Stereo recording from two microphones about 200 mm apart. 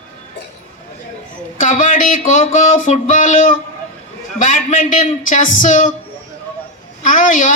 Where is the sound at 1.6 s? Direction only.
40° left (ahead or behind).